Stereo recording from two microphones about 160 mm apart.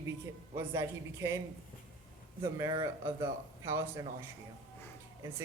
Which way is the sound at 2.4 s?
20° right (ahead or behind).